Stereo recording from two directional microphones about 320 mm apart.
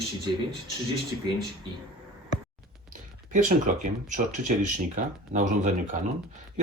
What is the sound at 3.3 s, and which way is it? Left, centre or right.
Speech, right.